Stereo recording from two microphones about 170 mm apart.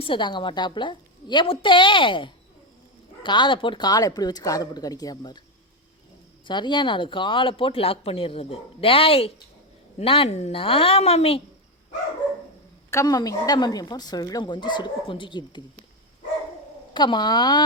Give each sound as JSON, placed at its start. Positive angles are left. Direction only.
{"t": 0.0, "sound": "speech", "side_deg": 30}
{"t": 6.4, "sound": "speech", "side_deg": 25}
{"t": 12.9, "sound": "speech", "side_deg": 20}
{"t": 16.9, "sound": "speech", "side_deg": 25}